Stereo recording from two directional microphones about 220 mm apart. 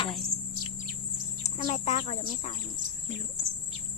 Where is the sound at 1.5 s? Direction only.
30° left (ahead or behind).